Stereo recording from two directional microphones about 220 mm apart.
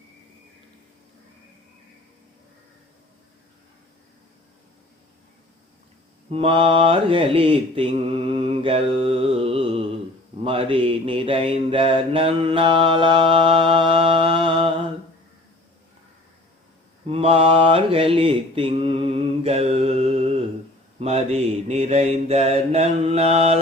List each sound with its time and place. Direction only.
6.3 s mantra: 25° right (ahead or behind)
17.1 s mantra: 25° right (ahead or behind)